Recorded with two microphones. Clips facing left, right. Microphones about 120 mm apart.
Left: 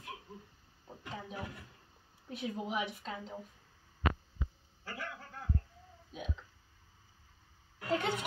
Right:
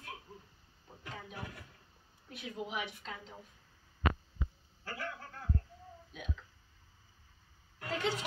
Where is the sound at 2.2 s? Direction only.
35° left (ahead or behind).